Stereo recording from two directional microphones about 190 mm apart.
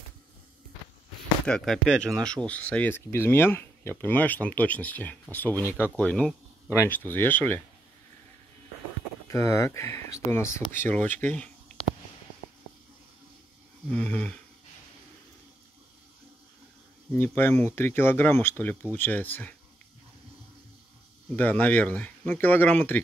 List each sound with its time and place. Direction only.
1.4 s speech: 5° left (ahead or behind)
9.3 s speech: 15° left (ahead or behind)
13.8 s speech: 5° left (ahead or behind)
17.4 s speech: 10° left (ahead or behind)
21.4 s speech: 10° left (ahead or behind)